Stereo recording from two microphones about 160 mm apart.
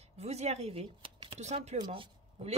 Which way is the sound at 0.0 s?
40° right (ahead or behind).